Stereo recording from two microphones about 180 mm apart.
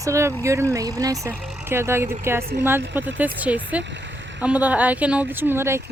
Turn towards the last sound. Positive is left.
turn(degrees=-15)  # may be behind; listen again after turning